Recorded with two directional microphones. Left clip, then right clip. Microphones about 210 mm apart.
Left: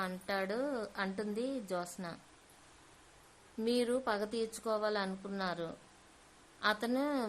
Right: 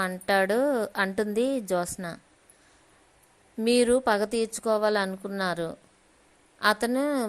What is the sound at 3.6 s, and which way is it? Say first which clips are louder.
A woman's voice: right 11 dB; 30° right (ahead or behind).